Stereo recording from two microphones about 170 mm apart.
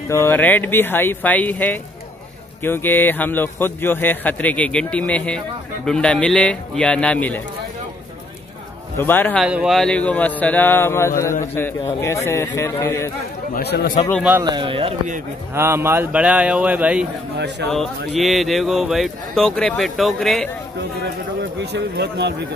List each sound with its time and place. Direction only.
0.1 s a man's voice: 15° left (ahead or behind)
8.9 s a man's voice: 10° left (ahead or behind)
9.4 s a man's voice: 5° right (ahead or behind); by 13.1 s 15° left (ahead or behind)
13.6 s speech: 70° left (ahead or behind)
14.4 s speech: 25° right (ahead or behind)
15.5 s a man's voice: 15° right (ahead or behind)
17.6 s speech: 85° right
18.2 s speech: centre (ahead or behind)
21.0 s speech: 80° right